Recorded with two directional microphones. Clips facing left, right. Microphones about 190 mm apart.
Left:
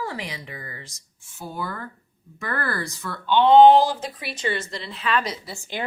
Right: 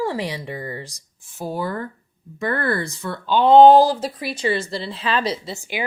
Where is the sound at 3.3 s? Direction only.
40° right (ahead or behind).